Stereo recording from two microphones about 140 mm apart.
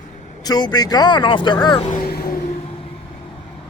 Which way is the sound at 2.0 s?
90° left.